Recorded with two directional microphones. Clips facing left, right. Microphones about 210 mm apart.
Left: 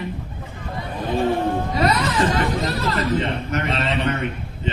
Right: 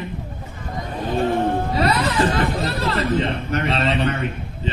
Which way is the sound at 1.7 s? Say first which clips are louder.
Even; 35° right (ahead or behind).